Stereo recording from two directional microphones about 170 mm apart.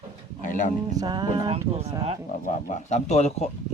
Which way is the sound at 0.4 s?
50° left (ahead or behind).